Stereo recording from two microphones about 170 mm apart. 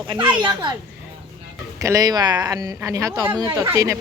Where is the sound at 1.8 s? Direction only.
20° right (ahead or behind).